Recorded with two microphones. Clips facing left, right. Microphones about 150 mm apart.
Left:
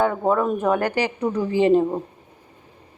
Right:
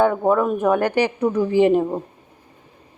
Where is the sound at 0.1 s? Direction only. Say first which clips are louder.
Right 2 dB; 5° right (ahead or behind).